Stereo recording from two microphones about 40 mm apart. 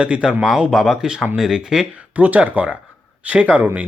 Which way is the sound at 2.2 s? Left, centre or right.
Right.